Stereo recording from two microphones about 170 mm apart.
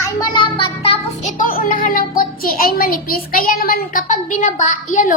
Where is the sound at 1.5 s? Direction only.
55° left (ahead or behind).